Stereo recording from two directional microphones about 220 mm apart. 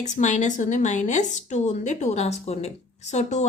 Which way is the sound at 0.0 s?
30° left (ahead or behind).